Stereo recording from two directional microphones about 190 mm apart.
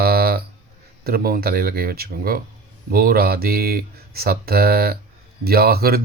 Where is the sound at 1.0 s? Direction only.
55° right (ahead or behind).